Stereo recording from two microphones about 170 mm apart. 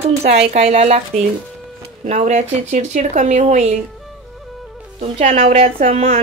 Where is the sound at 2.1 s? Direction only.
40° right (ahead or behind).